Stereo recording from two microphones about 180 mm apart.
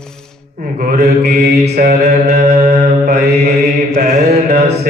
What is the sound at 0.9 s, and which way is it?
Mantra, 40° right (ahead or behind).